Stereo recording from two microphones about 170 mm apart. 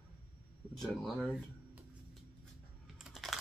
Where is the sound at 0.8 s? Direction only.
Centre (ahead or behind).